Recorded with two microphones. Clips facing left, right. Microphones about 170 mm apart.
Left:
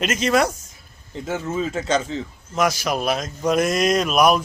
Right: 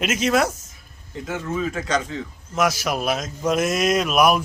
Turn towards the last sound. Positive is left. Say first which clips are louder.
# left 1 dB
turn(degrees=-5)  # may be behind; listen again after turning